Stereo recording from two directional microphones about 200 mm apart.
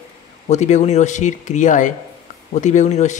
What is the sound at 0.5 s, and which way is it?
A man's voice, 35° left (ahead or behind).